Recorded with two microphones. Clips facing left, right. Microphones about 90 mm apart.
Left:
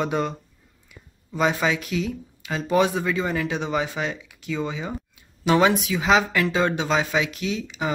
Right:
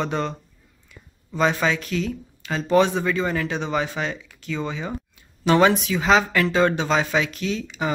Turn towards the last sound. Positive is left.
turn(degrees=10)  # may be behind; listen again after turning